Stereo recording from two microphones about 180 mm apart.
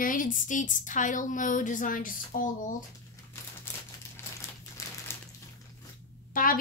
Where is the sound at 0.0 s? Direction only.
50° left (ahead or behind).